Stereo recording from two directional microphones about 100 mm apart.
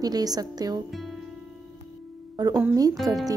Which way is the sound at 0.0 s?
40° right (ahead or behind).